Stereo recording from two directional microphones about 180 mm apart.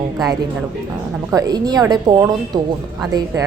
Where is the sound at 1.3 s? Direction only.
20° right (ahead or behind).